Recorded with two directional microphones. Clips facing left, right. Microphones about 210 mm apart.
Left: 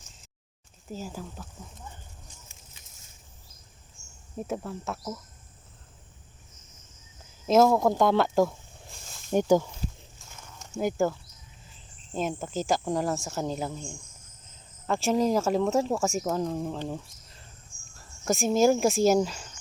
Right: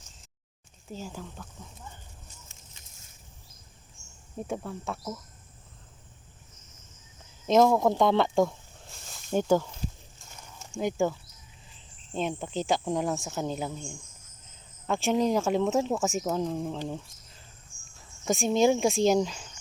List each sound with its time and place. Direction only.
0.9 s speech: 5° left (ahead or behind)
4.4 s speech: centre (ahead or behind)
7.4 s speech: 5° left (ahead or behind)
9.3 s speech: 10° left (ahead or behind)
12.1 s speech: 5° left (ahead or behind)
16.9 s a sound: centre (ahead or behind)
17.9 s speech: centre (ahead or behind)